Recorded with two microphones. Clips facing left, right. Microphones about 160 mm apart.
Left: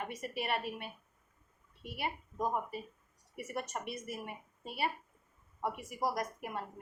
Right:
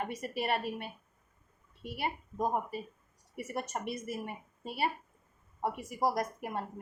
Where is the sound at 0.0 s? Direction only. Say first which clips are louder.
Right 4 dB; 35° right (ahead or behind).